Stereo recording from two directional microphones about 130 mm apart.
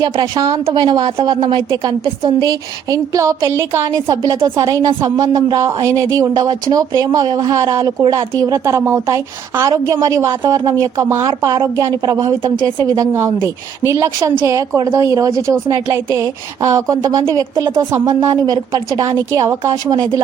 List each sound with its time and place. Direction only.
0.0 s a woman's voice: 30° right (ahead or behind)